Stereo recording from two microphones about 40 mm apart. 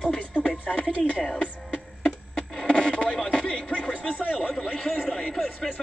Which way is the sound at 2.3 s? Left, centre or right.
Left.